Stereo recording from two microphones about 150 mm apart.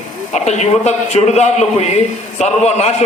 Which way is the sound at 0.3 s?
50° left (ahead or behind).